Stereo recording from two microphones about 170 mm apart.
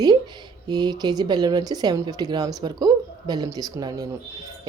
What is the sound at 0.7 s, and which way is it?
Speech, 25° right (ahead or behind).